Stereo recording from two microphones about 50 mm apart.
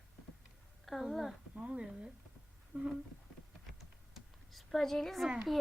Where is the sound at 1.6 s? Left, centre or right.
Right.